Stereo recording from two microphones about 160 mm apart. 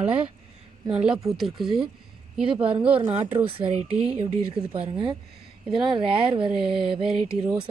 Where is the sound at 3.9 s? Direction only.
5° right (ahead or behind).